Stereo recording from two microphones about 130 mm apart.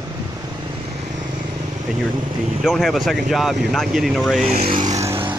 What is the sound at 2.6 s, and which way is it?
Speech, centre (ahead or behind).